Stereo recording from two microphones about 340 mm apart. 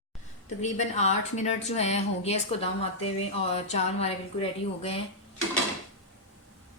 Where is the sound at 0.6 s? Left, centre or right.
Centre.